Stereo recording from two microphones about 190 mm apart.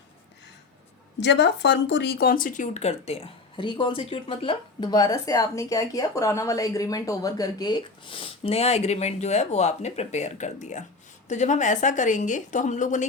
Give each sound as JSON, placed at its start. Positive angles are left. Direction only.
{"t": 1.2, "sound": "a woman's voice", "side_deg": 65}